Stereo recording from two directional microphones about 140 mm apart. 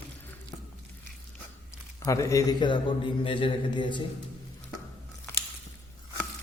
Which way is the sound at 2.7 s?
35° left (ahead or behind).